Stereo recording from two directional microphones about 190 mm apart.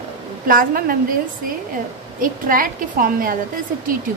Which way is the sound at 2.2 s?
45° right (ahead or behind).